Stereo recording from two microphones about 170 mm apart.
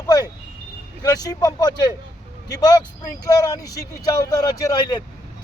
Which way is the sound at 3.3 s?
20° left (ahead or behind).